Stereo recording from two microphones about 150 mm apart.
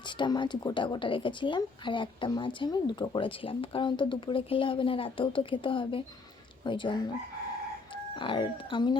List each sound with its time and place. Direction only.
0.2 s speech: 30° left (ahead or behind)
8.1 s speech: 35° left (ahead or behind)